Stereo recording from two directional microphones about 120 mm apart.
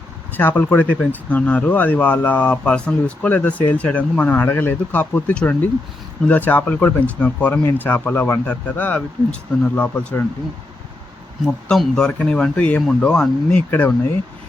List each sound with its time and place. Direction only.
0.3 s speech: 15° left (ahead or behind)
11.7 s speech: 5° left (ahead or behind)